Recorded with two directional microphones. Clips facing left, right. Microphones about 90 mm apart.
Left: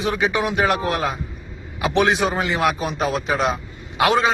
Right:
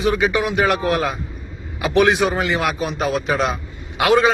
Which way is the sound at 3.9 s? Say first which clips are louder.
Right 2 dB; 25° left (ahead or behind).